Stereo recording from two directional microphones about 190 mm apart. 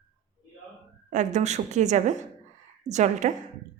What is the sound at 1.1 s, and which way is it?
A woman's voice, 40° right (ahead or behind).